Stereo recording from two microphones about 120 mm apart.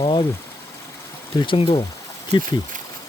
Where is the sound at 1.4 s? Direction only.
45° left (ahead or behind).